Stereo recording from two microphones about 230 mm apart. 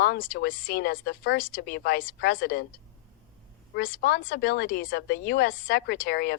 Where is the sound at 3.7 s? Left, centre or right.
Left.